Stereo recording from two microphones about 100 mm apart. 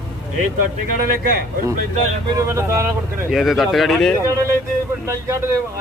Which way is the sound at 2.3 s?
30° right (ahead or behind).